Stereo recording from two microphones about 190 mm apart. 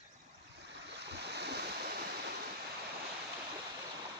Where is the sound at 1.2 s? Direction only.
60° right (ahead or behind).